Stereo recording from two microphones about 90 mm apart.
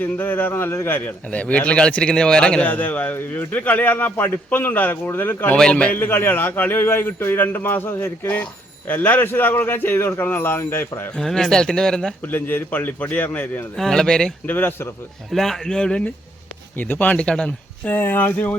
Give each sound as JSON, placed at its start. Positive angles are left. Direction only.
{"t": 0.0, "sound": "a man's voice", "side_deg": 20}
{"t": 11.2, "sound": "speech", "side_deg": 5}
{"t": 12.2, "sound": "a man's voice", "side_deg": 20}
{"t": 13.7, "sound": "speech", "side_deg": 5}
{"t": 14.4, "sound": "a man's voice", "side_deg": 25}
{"t": 15.3, "sound": "speech", "side_deg": 5}
{"t": 17.9, "sound": "a man's voice", "side_deg": 20}